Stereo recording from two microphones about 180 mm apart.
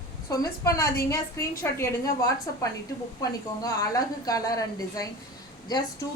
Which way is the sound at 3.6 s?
20° left (ahead or behind).